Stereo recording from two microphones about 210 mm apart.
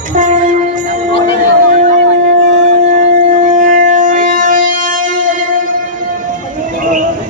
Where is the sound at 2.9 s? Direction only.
40° right (ahead or behind).